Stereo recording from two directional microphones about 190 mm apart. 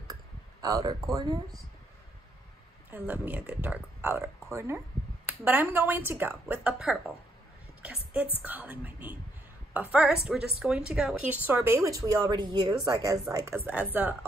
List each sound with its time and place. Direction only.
0.1 s clicking: 20° right (ahead or behind)
2.9 s speech: 10° right (ahead or behind)